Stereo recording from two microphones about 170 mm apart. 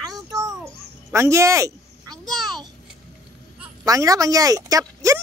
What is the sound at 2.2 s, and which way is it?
Speech, centre (ahead or behind).